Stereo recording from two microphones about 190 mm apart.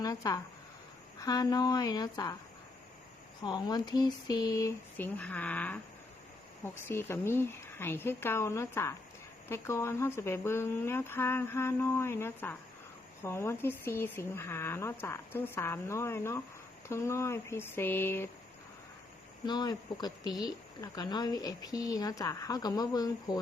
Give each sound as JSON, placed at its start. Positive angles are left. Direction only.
{"t": 0.0, "sound": "speech", "side_deg": 20}
{"t": 3.4, "sound": "speech", "side_deg": 20}
{"t": 6.8, "sound": "speech", "side_deg": 15}
{"t": 19.5, "sound": "speech", "side_deg": 20}